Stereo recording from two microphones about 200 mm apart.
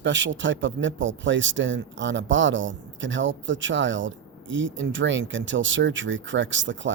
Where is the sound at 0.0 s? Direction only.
65° right (ahead or behind).